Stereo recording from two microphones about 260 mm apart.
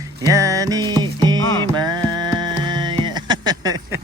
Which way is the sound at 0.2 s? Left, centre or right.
Centre.